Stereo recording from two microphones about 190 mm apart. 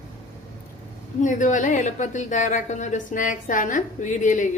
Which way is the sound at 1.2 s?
40° left (ahead or behind).